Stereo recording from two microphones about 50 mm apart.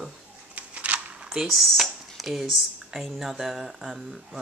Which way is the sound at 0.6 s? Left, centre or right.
Right.